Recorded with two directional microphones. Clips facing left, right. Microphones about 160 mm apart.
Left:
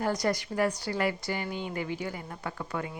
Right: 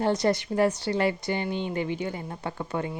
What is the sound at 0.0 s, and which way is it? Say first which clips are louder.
A woman's voice: right 5 dB; 25° right (ahead or behind).